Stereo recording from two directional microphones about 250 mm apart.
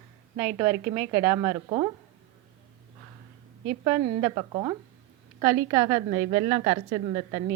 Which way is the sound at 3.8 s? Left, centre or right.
Centre.